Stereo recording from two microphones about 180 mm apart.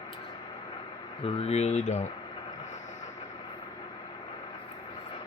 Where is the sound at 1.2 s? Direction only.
35° left (ahead or behind).